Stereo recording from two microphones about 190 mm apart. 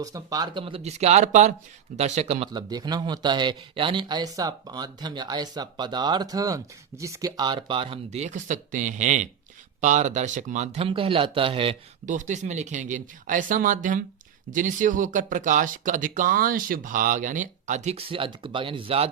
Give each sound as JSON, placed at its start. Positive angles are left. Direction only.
{"t": 0.0, "sound": "speech", "side_deg": -20}
{"t": 12.0, "sound": "speech", "side_deg": -40}